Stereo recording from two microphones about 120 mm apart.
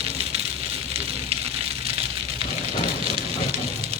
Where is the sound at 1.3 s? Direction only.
60° right (ahead or behind).